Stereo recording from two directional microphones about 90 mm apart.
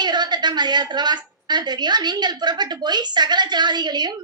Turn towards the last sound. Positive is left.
turn(degrees=-55)  # may be behind; listen again after turning